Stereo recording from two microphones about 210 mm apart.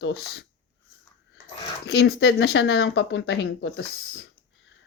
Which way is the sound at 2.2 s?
75° left (ahead or behind).